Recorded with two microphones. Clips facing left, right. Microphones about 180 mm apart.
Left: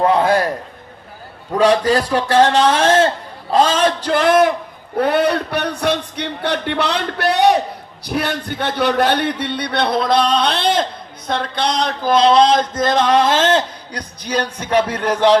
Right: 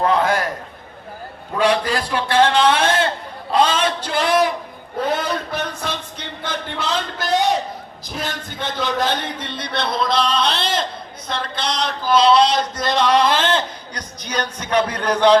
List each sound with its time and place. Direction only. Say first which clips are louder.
0.0 s a man's voice: left 4 dB; 30° left (ahead or behind)
1.5 s a man's voice: left 5 dB; 40° left (ahead or behind)
4.9 s a man's voice: left 6 dB; 65° left (ahead or behind)
12.8 s a man's voice: left 1 dB; 50° left (ahead or behind); by 15.3 s 25° left (ahead or behind)